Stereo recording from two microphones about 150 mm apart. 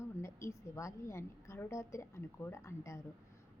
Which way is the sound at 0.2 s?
20° left (ahead or behind).